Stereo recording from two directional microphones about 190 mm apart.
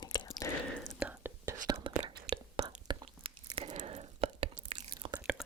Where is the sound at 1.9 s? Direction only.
25° right (ahead or behind).